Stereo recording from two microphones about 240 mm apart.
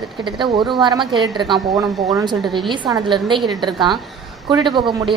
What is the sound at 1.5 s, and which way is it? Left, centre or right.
Speech, centre.